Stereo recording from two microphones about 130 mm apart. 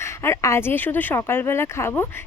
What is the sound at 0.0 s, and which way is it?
Speech, 20° left (ahead or behind).